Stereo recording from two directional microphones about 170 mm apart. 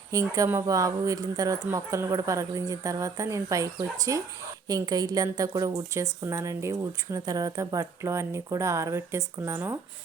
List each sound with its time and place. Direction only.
0.1 s a woman's voice: 20° right (ahead or behind)